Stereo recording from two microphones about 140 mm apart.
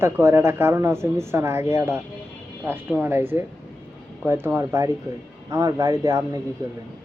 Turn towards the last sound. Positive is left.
turn(degrees=-25)  # may be behind; listen again after turning